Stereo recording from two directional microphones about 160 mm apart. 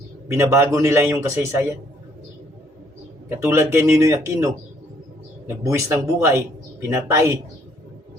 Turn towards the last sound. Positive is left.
turn(degrees=-20)  # may be behind; listen again after turning